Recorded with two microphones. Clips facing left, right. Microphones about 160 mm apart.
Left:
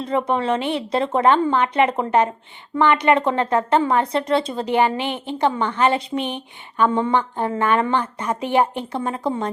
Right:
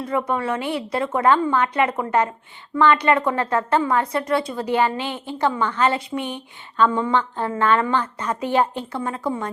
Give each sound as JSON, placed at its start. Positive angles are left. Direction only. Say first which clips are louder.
{"t": 0.0, "sound": "a woman's voice", "louder": "left 2 dB", "side_deg": 25}